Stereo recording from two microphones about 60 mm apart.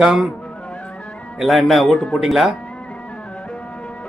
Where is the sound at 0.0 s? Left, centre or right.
Centre.